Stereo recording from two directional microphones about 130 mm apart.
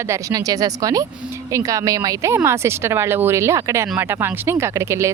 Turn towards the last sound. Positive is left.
turn(degrees=-20)  # may be behind; listen again after turning